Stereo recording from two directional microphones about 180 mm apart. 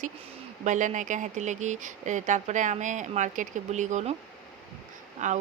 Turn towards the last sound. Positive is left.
turn(degrees=-40)  # may be behind; listen again after turning